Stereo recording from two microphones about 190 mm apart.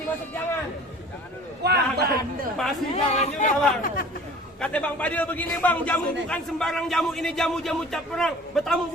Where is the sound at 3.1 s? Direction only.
35° left (ahead or behind).